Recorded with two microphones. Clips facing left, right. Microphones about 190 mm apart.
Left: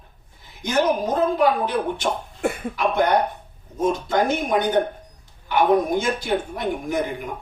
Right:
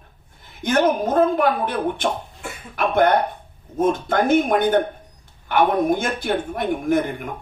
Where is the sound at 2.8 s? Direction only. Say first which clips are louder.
Right 3 dB; 55° right (ahead or behind).